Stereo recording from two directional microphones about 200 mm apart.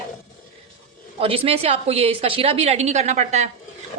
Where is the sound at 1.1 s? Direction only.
30° right (ahead or behind).